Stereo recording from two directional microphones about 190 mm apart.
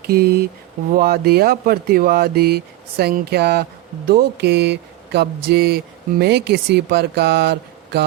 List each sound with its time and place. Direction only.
0.0 s speech: 55° right (ahead or behind)